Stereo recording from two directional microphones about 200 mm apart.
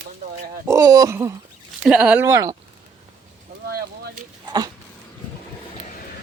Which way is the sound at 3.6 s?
50° right (ahead or behind).